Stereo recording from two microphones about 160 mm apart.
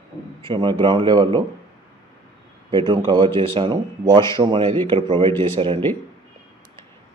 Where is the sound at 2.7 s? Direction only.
30° right (ahead or behind).